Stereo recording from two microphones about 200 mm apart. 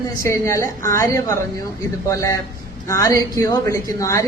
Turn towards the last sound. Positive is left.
turn(degrees=15)  # may be behind; listen again after turning